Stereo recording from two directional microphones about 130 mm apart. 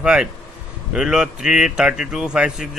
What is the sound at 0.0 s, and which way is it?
A man's voice, 5° right (ahead or behind).